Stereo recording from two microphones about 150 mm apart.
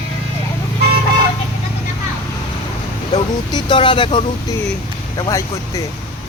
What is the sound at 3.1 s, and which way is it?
Speech, 30° left (ahead or behind).